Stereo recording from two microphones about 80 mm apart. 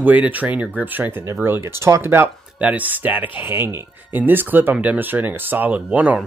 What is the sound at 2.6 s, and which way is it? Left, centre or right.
Speech, centre.